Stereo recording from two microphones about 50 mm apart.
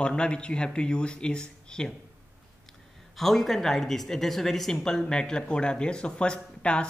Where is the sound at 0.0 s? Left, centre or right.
Centre.